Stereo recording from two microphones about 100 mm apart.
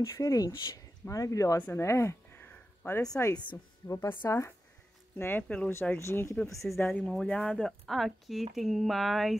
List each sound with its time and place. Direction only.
0.0 s speech: 35° left (ahead or behind)
1.6 s a sound: 25° left (ahead or behind)
3.1 s speech: 30° left (ahead or behind)
5.9 s speech: 25° left (ahead or behind)
6.8 s speech: 10° left (ahead or behind)